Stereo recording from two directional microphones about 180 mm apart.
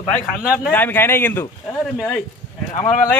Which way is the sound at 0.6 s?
10° left (ahead or behind).